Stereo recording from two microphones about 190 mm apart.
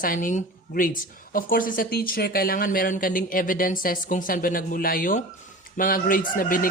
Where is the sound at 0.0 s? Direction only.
45° left (ahead or behind).